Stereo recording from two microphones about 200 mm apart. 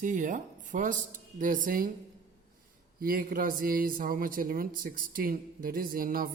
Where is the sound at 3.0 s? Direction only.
45° right (ahead or behind).